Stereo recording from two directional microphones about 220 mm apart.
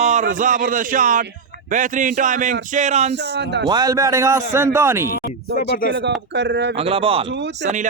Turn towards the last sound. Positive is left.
turn(degrees=-35)  # may be behind; listen again after turning